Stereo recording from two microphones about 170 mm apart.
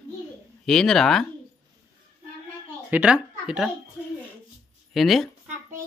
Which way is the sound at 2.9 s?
5° right (ahead or behind).